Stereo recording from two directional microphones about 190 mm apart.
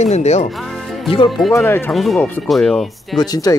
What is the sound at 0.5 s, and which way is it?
Music, centre (ahead or behind).